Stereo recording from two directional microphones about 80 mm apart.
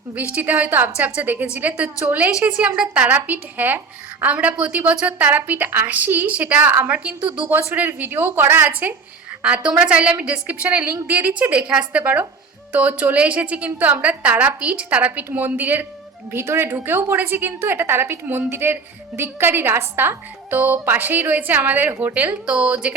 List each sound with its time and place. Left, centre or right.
0.3 s a woman's voice: centre